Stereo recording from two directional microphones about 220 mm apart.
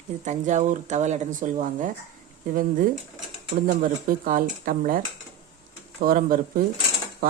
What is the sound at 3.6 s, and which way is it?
Speech, 40° right (ahead or behind).